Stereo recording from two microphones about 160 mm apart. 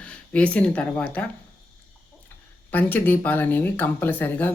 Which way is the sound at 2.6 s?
10° left (ahead or behind).